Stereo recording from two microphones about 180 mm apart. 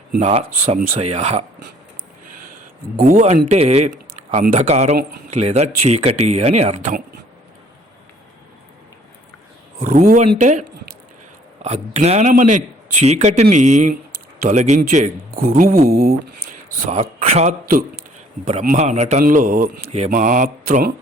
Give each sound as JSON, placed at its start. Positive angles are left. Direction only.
{"t": 0.2, "sound": "speech", "side_deg": -35}
{"t": 2.9, "sound": "speech", "side_deg": -45}
{"t": 9.7, "sound": "a man's voice", "side_deg": -50}
{"t": 15.4, "sound": "a man's voice", "side_deg": -50}
{"t": 16.9, "sound": "a man's voice", "side_deg": -40}